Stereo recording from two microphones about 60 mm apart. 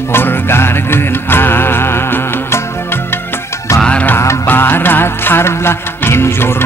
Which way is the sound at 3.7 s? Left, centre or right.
Centre.